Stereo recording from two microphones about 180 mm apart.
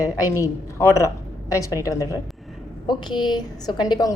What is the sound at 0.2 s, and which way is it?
A woman's voice, 15° left (ahead or behind).